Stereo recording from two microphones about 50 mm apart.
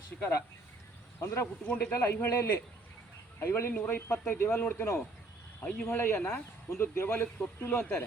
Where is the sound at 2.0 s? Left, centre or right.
Left.